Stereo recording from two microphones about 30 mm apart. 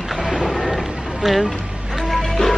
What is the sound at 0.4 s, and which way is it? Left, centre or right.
Music, centre.